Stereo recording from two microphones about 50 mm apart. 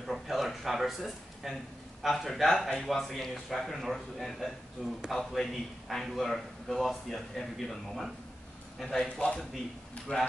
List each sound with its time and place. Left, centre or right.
0.0 s a sound: centre
2.0 s a man's voice: centre
9.2 s speech: centre